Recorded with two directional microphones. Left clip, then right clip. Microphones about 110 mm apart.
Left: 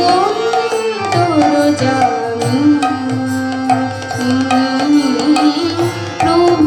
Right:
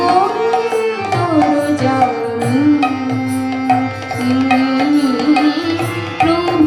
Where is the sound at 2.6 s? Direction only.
50° left (ahead or behind).